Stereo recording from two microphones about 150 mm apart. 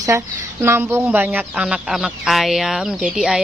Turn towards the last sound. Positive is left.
turn(degrees=-5)  # may be behind; listen again after turning